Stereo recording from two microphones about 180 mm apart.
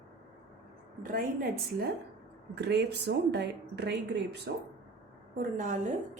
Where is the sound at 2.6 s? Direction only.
70° right (ahead or behind).